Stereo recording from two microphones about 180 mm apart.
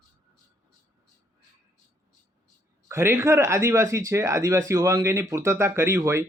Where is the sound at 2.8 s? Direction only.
15° right (ahead or behind).